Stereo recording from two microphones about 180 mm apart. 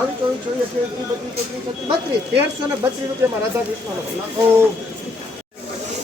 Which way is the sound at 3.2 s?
15° right (ahead or behind).